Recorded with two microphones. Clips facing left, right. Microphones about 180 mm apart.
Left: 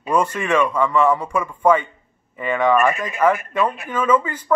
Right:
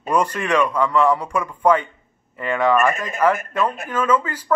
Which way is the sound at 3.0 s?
10° left (ahead or behind).